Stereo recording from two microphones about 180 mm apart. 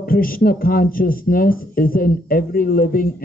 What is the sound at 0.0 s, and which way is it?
Speech, 55° left (ahead or behind).